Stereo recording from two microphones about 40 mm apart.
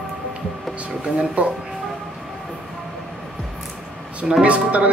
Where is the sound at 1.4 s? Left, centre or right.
Right.